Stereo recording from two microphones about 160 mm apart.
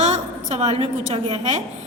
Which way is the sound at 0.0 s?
50° right (ahead or behind).